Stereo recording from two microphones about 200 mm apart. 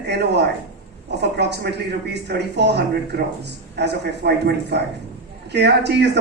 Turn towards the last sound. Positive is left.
turn(degrees=-55)  # may be behind; listen again after turning